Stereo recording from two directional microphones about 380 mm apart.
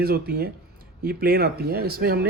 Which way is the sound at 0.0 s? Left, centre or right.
Right.